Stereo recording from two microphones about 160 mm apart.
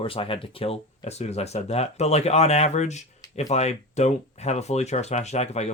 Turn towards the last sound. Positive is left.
turn(degrees=45)  # may be behind; listen again after turning